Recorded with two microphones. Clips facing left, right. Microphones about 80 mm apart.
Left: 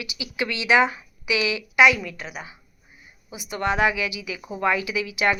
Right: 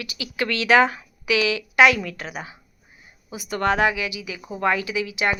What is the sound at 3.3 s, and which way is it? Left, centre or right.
Speech, right.